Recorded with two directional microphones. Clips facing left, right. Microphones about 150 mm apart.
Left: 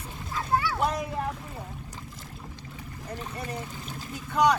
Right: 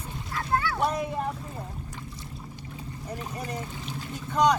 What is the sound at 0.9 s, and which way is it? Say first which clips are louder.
Speech: right 1 dB; 10° right (ahead or behind).